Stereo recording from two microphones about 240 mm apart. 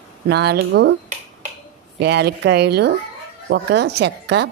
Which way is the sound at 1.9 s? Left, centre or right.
Right.